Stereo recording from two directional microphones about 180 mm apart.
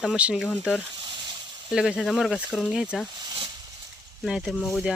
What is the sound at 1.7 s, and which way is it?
Speech, 5° right (ahead or behind).